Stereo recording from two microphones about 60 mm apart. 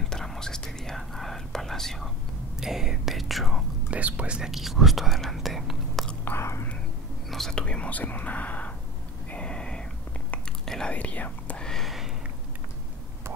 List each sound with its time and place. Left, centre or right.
0.0 s whispering: centre
2.6 s speech: centre
3.9 s speech: right
4.4 s speech: centre
6.2 s speech: left
7.2 s speech: centre
7.5 s speech: centre
9.3 s a sound: centre
10.6 s whispering: centre
10.9 s speech: left
11.6 s a sound: centre